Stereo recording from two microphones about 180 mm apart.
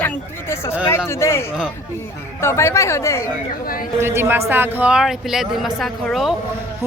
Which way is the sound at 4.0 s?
15° right (ahead or behind).